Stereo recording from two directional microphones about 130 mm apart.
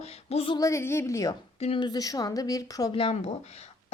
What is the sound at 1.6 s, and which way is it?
Speech, 45° left (ahead or behind).